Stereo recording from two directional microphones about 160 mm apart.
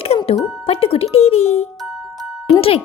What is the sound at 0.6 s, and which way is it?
A woman's voice, 35° left (ahead or behind).